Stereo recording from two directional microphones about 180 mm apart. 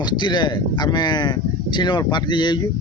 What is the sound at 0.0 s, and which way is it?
Speech, 25° left (ahead or behind).